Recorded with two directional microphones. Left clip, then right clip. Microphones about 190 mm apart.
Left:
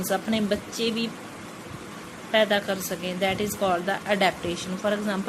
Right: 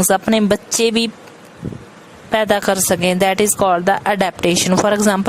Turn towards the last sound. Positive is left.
turn(degrees=-55)  # may be behind; listen again after turning